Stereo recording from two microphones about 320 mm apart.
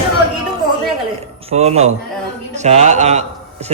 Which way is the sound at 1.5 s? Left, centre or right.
Centre.